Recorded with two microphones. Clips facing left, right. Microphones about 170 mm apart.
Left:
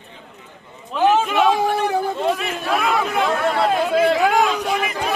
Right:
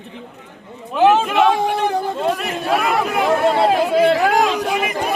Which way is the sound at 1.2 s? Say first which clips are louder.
Right 1 dB; 5° right (ahead or behind).